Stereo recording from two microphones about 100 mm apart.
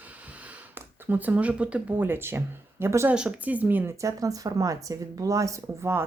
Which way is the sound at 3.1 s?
10° right (ahead or behind).